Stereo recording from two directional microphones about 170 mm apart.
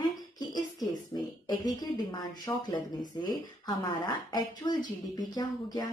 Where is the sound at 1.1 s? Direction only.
20° left (ahead or behind).